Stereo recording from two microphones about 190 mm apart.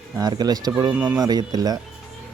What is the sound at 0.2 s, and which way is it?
Speech, 20° right (ahead or behind).